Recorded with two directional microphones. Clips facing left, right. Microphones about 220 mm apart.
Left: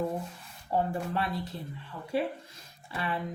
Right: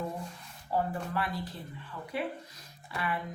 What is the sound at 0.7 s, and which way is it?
Speech, 25° left (ahead or behind).